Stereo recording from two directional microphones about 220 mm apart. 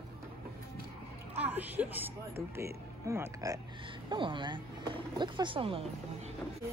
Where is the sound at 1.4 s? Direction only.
5° right (ahead or behind).